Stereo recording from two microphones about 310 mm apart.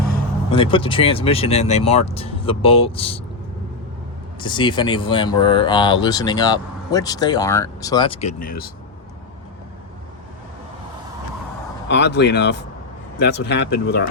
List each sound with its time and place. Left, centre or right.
0.5 s speech: centre
4.4 s speech: centre
11.9 s speech: left